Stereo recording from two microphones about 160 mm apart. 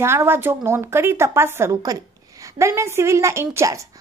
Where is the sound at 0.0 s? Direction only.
15° right (ahead or behind).